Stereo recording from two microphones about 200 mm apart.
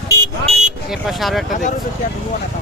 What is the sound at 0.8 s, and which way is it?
Speech, centre (ahead or behind).